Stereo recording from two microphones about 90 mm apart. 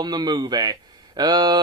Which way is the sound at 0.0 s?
55° right (ahead or behind).